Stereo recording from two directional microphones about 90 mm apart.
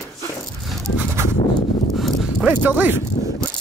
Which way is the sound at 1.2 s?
30° right (ahead or behind).